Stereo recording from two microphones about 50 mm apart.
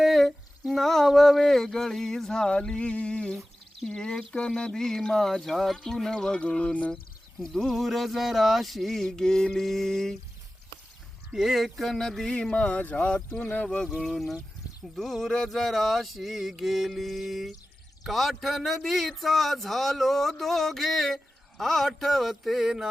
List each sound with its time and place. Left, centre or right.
0.0 s humming: centre
0.7 s speech: centre; by 6.9 s left
6.9 s speech: centre
11.3 s speech: centre
12.3 s speech: left
14.0 s speech: centre